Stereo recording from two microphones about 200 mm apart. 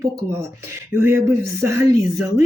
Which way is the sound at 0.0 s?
15° right (ahead or behind).